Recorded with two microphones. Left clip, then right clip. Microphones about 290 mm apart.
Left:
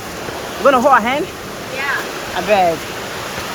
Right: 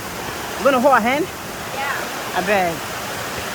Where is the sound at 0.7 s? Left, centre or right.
Centre.